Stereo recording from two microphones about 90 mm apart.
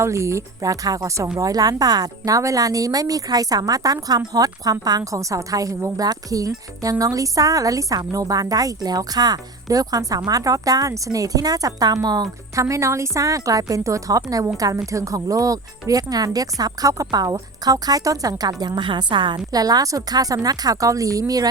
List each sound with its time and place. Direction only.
0.0 s a woman's voice: 35° right (ahead or behind); by 12.3 s 50° right (ahead or behind)
12.5 s a woman's voice: 35° right (ahead or behind)
18.8 s a woman's voice: 65° right (ahead or behind); by 21.4 s 40° right (ahead or behind)